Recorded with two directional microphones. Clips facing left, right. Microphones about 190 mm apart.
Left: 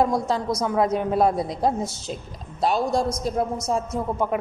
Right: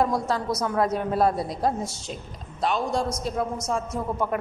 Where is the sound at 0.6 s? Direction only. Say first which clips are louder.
Left 2 dB; 10° left (ahead or behind).